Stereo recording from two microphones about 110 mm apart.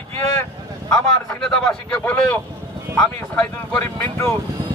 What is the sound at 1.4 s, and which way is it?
Speech, 5° left (ahead or behind).